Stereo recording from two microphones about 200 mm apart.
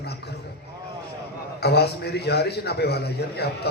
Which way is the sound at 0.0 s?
55° left (ahead or behind).